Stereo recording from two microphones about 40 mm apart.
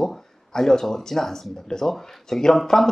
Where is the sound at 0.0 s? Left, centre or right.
Centre.